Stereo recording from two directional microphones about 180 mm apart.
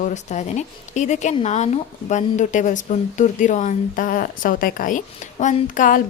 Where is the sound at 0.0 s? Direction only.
40° left (ahead or behind).